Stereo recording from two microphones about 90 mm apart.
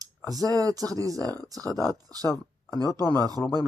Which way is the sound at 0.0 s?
45° right (ahead or behind).